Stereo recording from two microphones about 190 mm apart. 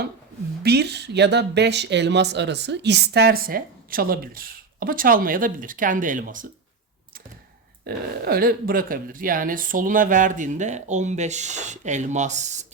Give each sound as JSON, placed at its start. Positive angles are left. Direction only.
{"t": 0.6, "sound": "speech", "side_deg": -60}
{"t": 7.9, "sound": "speech", "side_deg": -50}